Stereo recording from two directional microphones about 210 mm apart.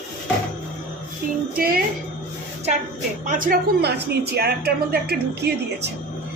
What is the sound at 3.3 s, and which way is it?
A woman's voice, 40° right (ahead or behind).